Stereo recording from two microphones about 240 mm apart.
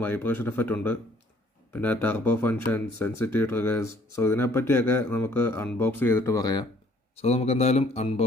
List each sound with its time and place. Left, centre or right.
0.0 s speech: centre; by 8.2 s left